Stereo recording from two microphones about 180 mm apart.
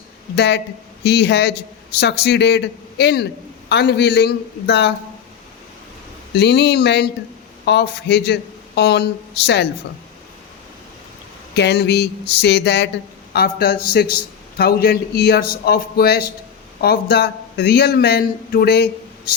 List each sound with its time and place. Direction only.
0.3 s a man's voice: 65° left (ahead or behind)
6.3 s a man's voice: 70° left (ahead or behind)
11.5 s a man's voice: 70° left (ahead or behind)